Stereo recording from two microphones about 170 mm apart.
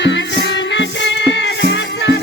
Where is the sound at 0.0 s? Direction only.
90° left.